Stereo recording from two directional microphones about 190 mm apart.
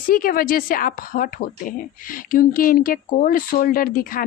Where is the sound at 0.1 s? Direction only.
50° left (ahead or behind).